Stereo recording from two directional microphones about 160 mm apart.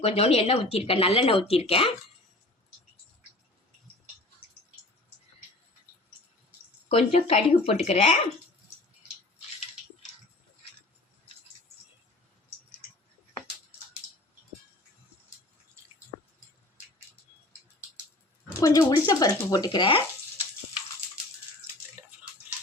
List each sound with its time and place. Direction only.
0.0 s speech: 40° left (ahead or behind)
6.8 s speech: 40° left (ahead or behind)
18.6 s speech: 20° left (ahead or behind)